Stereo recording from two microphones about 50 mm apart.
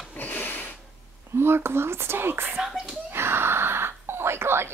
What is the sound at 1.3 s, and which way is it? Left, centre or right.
Speech, right.